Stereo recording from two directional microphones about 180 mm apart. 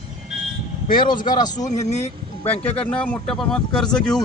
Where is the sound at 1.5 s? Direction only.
40° left (ahead or behind).